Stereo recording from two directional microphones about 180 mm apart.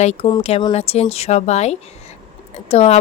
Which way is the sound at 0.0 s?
40° left (ahead or behind).